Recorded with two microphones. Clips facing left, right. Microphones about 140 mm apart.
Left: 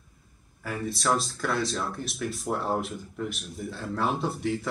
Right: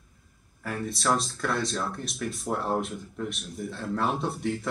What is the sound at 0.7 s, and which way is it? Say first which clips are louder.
Speech: even; centre (ahead or behind).